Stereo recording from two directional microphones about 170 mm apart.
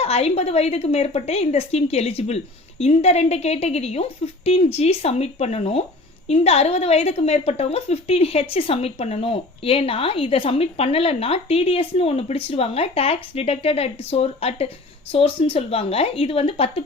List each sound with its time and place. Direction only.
0.0 s a woman's voice: 35° left (ahead or behind)